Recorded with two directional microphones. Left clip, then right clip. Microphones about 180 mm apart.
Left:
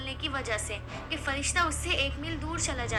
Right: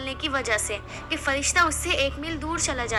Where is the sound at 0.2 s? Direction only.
35° right (ahead or behind).